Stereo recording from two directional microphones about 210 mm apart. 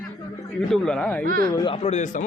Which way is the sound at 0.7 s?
5° left (ahead or behind).